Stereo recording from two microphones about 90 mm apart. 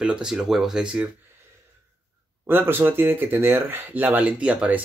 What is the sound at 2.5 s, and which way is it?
Speech, 25° right (ahead or behind).